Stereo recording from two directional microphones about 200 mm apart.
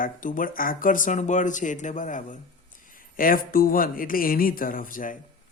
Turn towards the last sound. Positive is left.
turn(degrees=40)  # may be behind; listen again after turning